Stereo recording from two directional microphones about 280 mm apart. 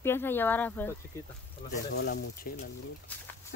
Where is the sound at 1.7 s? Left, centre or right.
Left.